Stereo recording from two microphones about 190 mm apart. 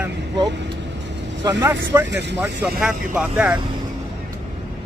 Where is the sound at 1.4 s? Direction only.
15° right (ahead or behind).